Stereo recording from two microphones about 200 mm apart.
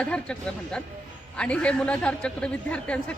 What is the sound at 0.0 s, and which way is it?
A man's voice, 5° left (ahead or behind).